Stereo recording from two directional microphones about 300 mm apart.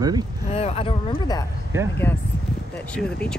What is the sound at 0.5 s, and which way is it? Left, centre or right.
Speech, centre.